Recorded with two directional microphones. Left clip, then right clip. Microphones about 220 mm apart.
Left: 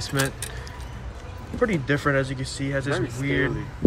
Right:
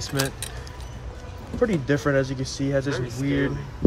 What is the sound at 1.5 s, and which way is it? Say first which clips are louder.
Speech: right 1 dB; 15° right (ahead or behind).